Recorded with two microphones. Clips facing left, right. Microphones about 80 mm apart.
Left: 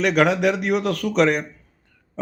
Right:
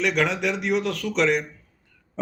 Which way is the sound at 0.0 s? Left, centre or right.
Left.